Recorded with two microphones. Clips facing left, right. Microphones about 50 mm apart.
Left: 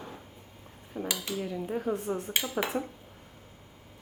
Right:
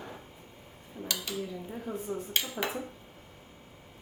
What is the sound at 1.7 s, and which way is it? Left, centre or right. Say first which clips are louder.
Speech: left 5 dB; left.